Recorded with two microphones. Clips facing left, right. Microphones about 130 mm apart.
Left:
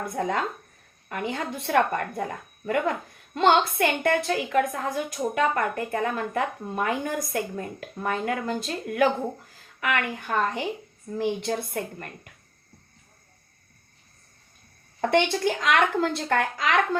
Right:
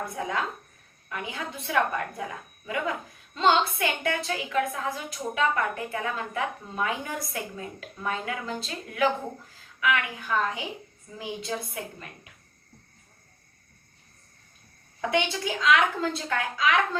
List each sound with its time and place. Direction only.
0.2 s a woman's voice: 55° left (ahead or behind)
15.0 s speech: 50° left (ahead or behind)